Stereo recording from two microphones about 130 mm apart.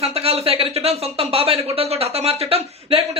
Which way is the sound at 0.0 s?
50° right (ahead or behind).